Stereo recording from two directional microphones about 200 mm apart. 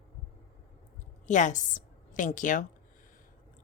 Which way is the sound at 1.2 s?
40° left (ahead or behind).